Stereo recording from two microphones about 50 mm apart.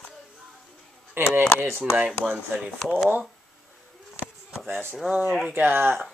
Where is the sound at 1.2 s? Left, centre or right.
Right.